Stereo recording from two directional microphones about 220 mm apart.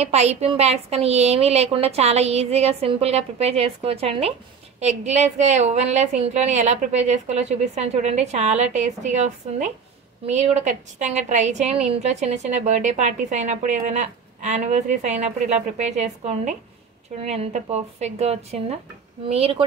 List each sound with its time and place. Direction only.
0.0 s a woman's voice: 30° right (ahead or behind)